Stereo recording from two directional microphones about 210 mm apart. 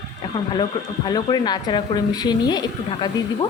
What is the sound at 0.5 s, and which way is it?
A woman's voice, 20° left (ahead or behind).